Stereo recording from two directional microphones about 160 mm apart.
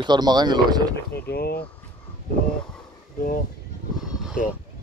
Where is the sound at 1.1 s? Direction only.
75° left (ahead or behind).